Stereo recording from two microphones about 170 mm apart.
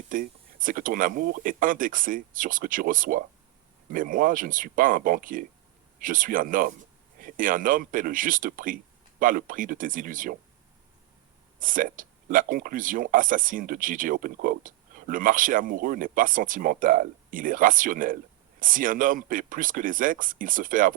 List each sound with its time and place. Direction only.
0.1 s speech: 55° right (ahead or behind)
11.6 s speech: 55° right (ahead or behind)